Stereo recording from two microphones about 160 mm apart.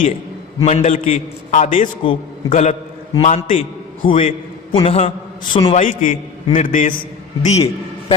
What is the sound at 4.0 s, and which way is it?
A man's voice, 35° left (ahead or behind).